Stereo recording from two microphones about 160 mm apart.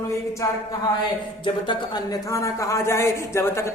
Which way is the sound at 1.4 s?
30° left (ahead or behind).